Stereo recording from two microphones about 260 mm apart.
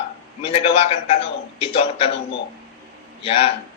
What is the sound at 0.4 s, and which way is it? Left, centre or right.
A woman's voice, left.